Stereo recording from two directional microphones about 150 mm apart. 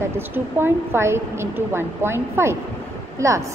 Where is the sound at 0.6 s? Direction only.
15° right (ahead or behind).